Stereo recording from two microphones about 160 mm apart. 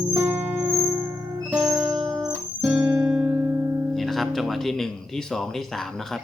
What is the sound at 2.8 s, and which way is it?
Music, 25° right (ahead or behind).